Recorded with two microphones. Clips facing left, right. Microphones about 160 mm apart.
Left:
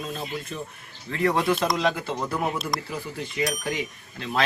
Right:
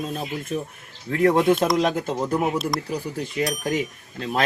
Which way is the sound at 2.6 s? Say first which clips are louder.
Right 4 dB; centre (ahead or behind).